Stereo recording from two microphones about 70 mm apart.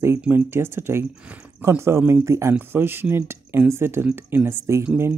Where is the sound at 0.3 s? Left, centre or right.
Right.